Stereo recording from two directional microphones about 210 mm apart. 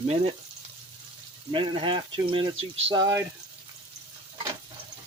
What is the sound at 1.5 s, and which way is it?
Speech, 25° right (ahead or behind).